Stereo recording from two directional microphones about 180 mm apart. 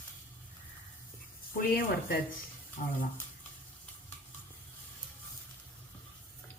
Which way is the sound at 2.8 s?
45° left (ahead or behind).